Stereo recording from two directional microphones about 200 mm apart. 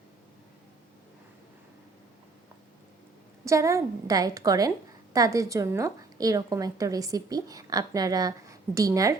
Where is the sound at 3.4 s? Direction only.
15° right (ahead or behind).